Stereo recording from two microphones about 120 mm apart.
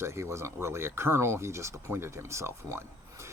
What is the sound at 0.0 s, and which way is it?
Speech, 25° right (ahead or behind).